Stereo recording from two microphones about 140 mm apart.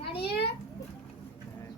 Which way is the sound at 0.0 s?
40° left (ahead or behind).